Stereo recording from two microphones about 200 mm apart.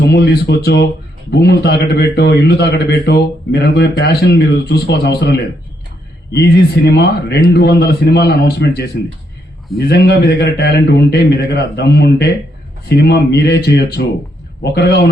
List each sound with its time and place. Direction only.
0.0 s a man's voice: 60° left (ahead or behind)